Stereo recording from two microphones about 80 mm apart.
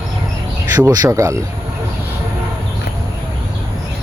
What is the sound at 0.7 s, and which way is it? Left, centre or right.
Speech, right.